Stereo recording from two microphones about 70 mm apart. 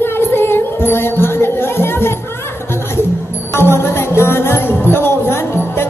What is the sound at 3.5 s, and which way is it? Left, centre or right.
Music, left.